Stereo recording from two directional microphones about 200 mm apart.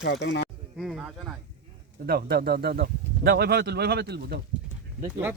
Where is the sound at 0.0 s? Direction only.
60° left (ahead or behind).